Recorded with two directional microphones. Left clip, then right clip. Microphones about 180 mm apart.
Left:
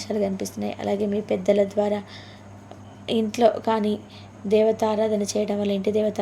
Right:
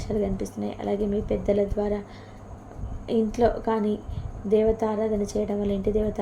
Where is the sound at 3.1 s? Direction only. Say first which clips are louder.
Left 3 dB; 20° left (ahead or behind).